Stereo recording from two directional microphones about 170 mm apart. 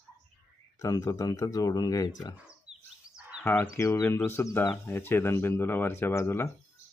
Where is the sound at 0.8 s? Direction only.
20° left (ahead or behind).